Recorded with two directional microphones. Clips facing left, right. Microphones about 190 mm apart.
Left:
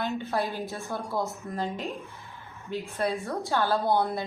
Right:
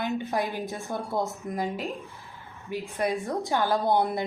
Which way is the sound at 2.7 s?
15° right (ahead or behind).